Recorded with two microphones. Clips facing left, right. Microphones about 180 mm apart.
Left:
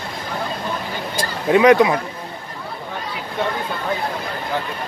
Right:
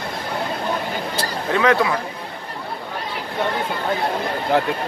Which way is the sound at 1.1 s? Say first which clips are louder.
Left 7 dB; 15° left (ahead or behind).